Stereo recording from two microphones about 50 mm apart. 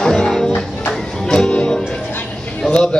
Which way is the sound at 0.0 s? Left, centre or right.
Centre.